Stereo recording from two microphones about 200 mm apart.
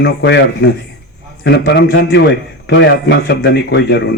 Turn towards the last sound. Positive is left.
turn(degrees=60)  # may be behind; listen again after turning